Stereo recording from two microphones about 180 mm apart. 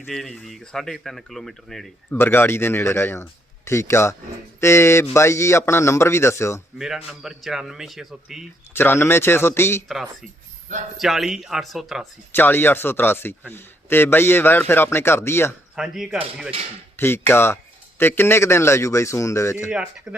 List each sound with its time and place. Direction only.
0.1 s speech: centre (ahead or behind)
2.1 s a man's voice: 10° left (ahead or behind)
6.7 s speech: centre (ahead or behind)
8.7 s a man's voice: 10° left (ahead or behind)
9.9 s speech: centre (ahead or behind)
10.7 s speech: 45° right (ahead or behind)
11.0 s speech: centre (ahead or behind)
12.3 s a man's voice: 10° left (ahead or behind)
15.7 s speech: 5° right (ahead or behind)
17.0 s a man's voice: 15° left (ahead or behind)
19.7 s speech: 5° right (ahead or behind)